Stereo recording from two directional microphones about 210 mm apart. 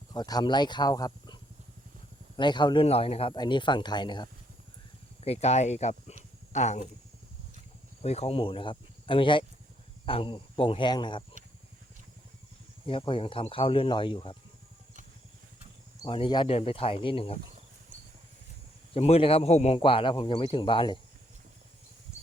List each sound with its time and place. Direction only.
0.1 s speech: 20° left (ahead or behind); by 6.8 s 35° left (ahead or behind)
8.0 s speech: 30° left (ahead or behind)
12.9 s speech: 25° left (ahead or behind)
16.0 s speech: 25° left (ahead or behind)
18.9 s speech: 30° left (ahead or behind)